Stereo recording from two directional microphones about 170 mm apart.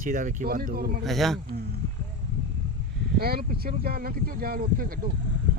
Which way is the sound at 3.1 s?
65° right (ahead or behind).